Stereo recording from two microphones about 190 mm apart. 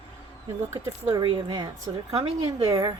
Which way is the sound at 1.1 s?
25° right (ahead or behind).